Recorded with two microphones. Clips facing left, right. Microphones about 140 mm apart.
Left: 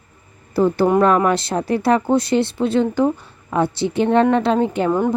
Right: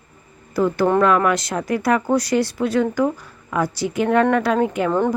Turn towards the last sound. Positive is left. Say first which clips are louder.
# left 1 dB
turn(degrees=5)  # may be behind; listen again after turning